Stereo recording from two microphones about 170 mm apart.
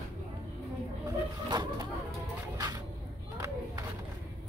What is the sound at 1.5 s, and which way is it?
Bird, 25° right (ahead or behind).